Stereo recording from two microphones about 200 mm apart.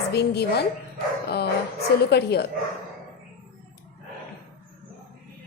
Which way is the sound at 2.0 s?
55° left (ahead or behind).